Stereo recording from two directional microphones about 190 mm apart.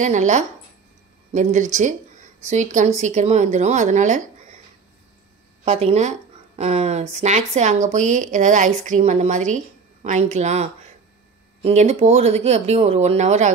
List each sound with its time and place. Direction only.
0.0 s speech: 40° right (ahead or behind)
5.7 s speech: 35° right (ahead or behind)